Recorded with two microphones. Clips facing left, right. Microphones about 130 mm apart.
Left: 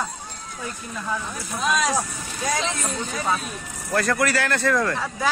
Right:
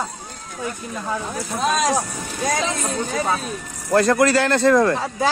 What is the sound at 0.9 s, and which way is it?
Speech, 25° right (ahead or behind).